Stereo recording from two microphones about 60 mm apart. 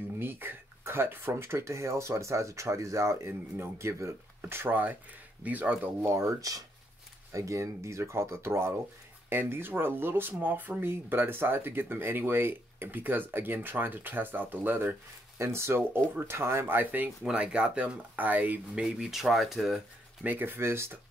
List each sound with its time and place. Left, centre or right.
0.2 s speech: right
3.3 s speech: right
3.7 s speech: right
4.5 s speech: right
6.0 s speech: right
7.3 s speech: right
15.3 s speech: right
17.2 s speech: centre
18.8 s speech: centre
20.2 s speech: right